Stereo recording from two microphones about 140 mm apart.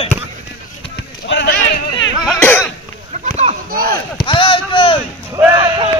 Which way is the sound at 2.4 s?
15° left (ahead or behind).